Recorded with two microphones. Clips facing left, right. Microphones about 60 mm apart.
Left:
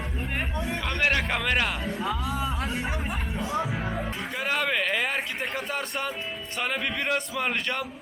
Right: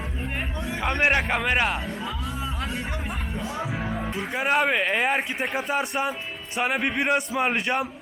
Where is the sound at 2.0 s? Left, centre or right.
Left.